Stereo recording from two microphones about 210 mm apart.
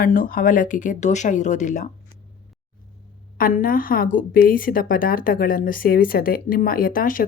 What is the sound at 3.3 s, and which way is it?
A woman's voice, 45° left (ahead or behind).